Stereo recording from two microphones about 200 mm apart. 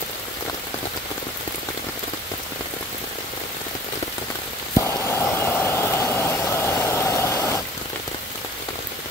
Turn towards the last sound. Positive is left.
turn(degrees=15)  # may be behind; listen again after turning